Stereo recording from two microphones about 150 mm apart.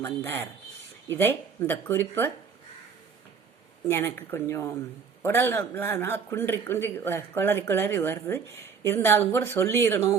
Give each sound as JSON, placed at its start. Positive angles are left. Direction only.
{"t": 0.0, "sound": "a man's voice", "side_deg": 15}
{"t": 3.8, "sound": "a man's voice", "side_deg": 15}